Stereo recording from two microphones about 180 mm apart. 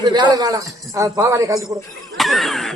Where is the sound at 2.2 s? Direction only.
Centre (ahead or behind).